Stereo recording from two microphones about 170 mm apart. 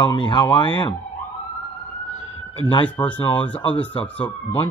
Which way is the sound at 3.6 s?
30° left (ahead or behind).